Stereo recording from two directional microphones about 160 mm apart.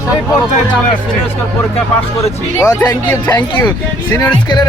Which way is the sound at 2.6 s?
20° left (ahead or behind).